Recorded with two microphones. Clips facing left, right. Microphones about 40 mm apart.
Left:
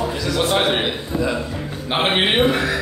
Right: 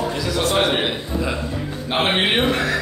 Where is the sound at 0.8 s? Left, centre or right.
Centre.